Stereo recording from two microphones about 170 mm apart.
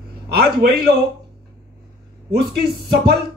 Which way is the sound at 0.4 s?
65° right (ahead or behind).